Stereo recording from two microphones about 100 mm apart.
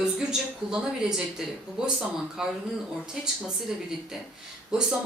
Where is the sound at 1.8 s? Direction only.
5° right (ahead or behind).